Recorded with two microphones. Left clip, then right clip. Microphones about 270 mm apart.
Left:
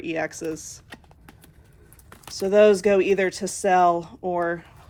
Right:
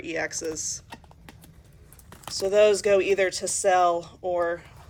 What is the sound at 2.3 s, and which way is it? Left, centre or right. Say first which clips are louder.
Speech: left 3 dB; left.